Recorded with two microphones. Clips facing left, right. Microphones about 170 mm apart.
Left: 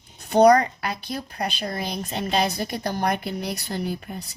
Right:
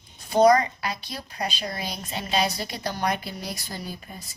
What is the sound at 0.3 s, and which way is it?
A woman's voice, 65° left (ahead or behind).